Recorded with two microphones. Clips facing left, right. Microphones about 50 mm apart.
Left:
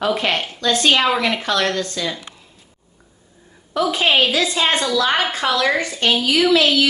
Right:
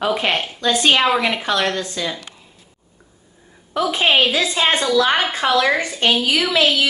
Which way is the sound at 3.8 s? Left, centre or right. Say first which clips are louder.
Even; right.